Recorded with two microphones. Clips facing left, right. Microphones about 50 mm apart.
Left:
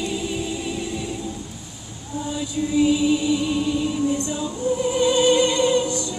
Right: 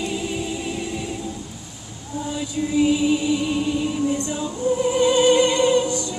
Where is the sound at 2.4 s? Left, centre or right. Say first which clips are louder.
Even; right.